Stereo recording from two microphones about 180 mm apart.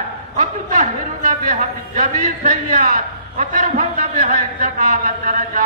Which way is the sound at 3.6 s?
40° right (ahead or behind).